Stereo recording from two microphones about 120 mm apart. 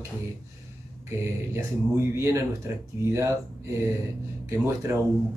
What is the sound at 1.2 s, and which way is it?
Speech, 25° right (ahead or behind).